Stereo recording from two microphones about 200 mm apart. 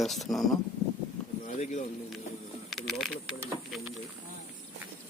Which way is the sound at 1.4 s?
35° left (ahead or behind).